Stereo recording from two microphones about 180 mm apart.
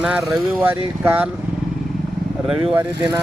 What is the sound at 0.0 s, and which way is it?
Speech, 5° right (ahead or behind).